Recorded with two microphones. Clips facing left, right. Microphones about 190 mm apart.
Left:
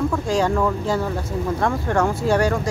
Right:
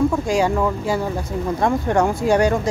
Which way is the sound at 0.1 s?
10° right (ahead or behind).